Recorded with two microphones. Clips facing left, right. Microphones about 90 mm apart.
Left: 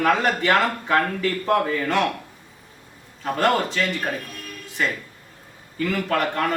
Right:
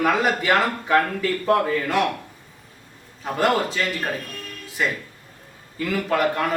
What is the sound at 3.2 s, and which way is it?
Speech, 5° right (ahead or behind).